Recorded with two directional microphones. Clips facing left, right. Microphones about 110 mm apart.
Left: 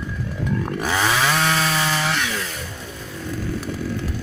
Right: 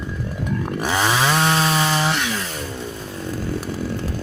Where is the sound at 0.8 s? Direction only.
20° right (ahead or behind).